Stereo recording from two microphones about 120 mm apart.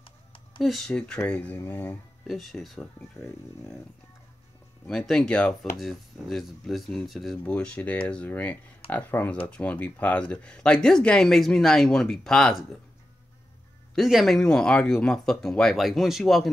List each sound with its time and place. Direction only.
0.0 s computer keyboard: 45° left (ahead or behind)
0.6 s speech: centre (ahead or behind)
2.2 s speech: centre (ahead or behind)
4.8 s speech: 5° left (ahead or behind)
13.9 s speech: centre (ahead or behind)